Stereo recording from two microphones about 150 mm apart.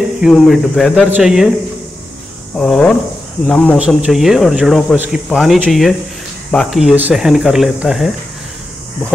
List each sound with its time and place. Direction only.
0.2 s speech: centre (ahead or behind)
2.5 s speech: 5° left (ahead or behind)